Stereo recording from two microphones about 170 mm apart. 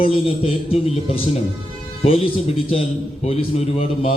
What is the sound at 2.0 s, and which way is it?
A man's voice, 35° left (ahead or behind).